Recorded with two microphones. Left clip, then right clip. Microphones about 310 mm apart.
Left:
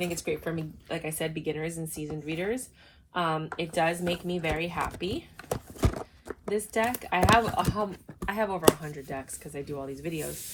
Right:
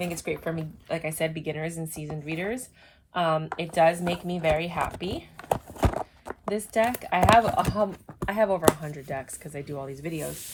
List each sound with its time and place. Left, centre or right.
0.0 s speech: right
5.8 s zipper: centre
7.0 s speech: right